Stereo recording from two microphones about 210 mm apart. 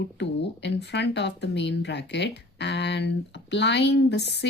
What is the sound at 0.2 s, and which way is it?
Speech, 55° left (ahead or behind).